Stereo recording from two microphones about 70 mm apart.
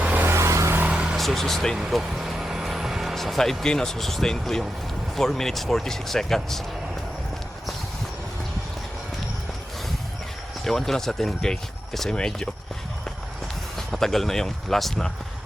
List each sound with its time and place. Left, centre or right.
0.0 s vehicle: right
0.3 s vehicle: right
0.9 s vehicle: centre
1.1 s speech: centre
10.6 s speech: centre
13.7 s speech: centre